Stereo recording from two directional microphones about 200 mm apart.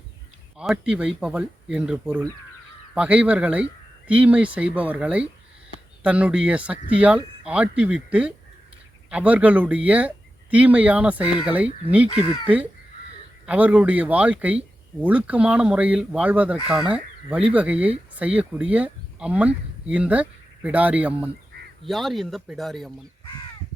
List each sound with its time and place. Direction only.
0.6 s speech: 5° right (ahead or behind)
2.0 s speech: 15° right (ahead or behind)
2.9 s speech: 5° right (ahead or behind)
13.4 s speech: 5° right (ahead or behind)
23.2 s crow: 25° left (ahead or behind)